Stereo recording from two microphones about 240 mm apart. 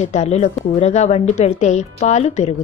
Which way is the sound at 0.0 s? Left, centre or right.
Left.